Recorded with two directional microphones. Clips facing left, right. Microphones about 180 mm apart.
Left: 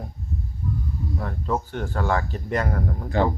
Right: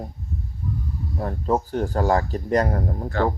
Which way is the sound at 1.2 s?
35° right (ahead or behind).